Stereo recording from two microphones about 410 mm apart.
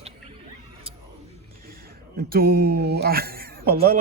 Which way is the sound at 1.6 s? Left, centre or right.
Right.